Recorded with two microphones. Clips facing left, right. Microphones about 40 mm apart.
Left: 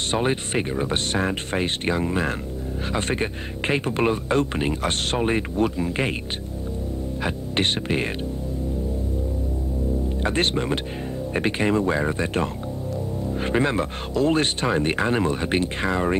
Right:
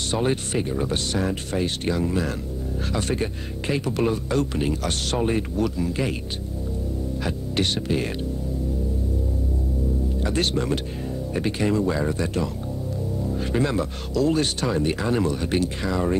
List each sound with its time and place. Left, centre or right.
0.1 s speech: left
7.2 s speech: left
10.2 s speech: left